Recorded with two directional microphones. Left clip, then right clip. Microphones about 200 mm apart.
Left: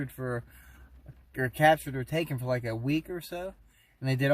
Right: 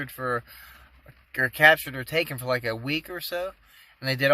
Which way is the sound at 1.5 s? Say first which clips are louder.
Right 5 dB; 5° right (ahead or behind).